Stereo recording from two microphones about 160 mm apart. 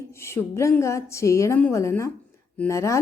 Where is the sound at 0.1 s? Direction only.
15° left (ahead or behind).